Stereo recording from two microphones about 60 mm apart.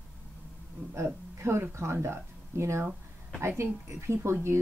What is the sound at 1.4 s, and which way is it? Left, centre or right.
Speech, right.